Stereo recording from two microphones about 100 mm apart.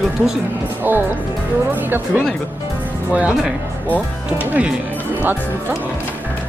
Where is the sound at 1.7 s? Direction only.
20° right (ahead or behind).